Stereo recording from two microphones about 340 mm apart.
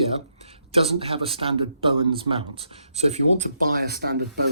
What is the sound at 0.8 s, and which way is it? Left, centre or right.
Speech, centre.